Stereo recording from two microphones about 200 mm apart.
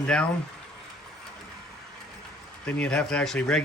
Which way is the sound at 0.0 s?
5° left (ahead or behind).